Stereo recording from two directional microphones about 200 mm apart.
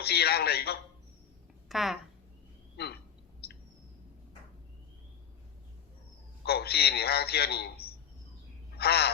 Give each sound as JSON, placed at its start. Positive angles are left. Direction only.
{"t": 0.0, "sound": "a man's voice", "side_deg": 55}
{"t": 1.7, "sound": "speech", "side_deg": 0}
{"t": 2.7, "sound": "a sound", "side_deg": 55}
{"t": 3.4, "sound": "bird", "side_deg": 55}
{"t": 6.4, "sound": "a man's voice", "side_deg": 55}
{"t": 8.7, "sound": "a sound", "side_deg": 50}